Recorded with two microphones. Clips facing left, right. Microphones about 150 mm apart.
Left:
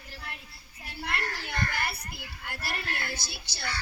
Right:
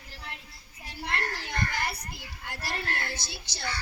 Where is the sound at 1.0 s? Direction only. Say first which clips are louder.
Right 1 dB; 20° right (ahead or behind).